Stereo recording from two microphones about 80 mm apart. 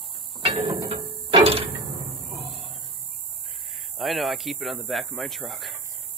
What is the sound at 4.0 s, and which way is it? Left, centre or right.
Speech, centre.